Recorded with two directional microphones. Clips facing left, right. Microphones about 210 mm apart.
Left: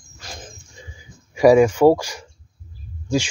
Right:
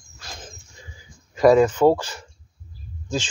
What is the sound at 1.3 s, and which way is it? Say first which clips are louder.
Speech: left 2 dB; 10° left (ahead or behind).